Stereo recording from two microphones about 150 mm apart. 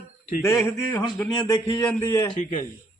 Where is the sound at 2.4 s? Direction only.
55° left (ahead or behind).